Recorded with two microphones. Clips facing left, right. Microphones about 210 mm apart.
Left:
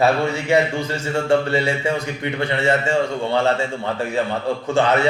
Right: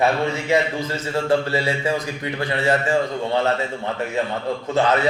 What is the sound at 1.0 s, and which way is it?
A man's voice, 25° left (ahead or behind).